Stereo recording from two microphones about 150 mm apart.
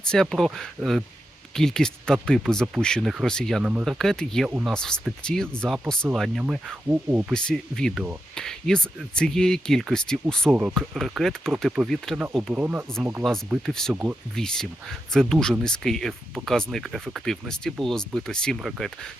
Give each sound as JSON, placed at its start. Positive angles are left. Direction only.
{"t": 0.1, "sound": "speech", "side_deg": 0}
{"t": 3.6, "sound": "speech", "side_deg": -5}
{"t": 4.4, "sound": "speech", "side_deg": -10}
{"t": 4.7, "sound": "speech", "side_deg": 5}
{"t": 5.6, "sound": "speech", "side_deg": -10}
{"t": 7.3, "sound": "speech", "side_deg": 5}
{"t": 10.5, "sound": "speech", "side_deg": -10}
{"t": 10.8, "sound": "speech", "side_deg": 0}
{"t": 13.2, "sound": "speech", "side_deg": 0}
{"t": 13.9, "sound": "speech", "side_deg": -10}
{"t": 14.3, "sound": "speech", "side_deg": 5}